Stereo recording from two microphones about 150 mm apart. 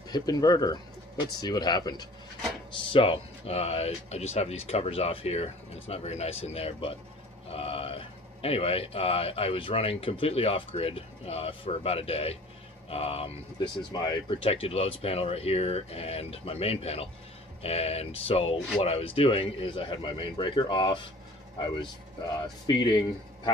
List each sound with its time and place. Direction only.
0.1 s a man's voice: 25° left (ahead or behind)
13.9 s a man's voice: 30° left (ahead or behind)
22.2 s speech: 30° left (ahead or behind)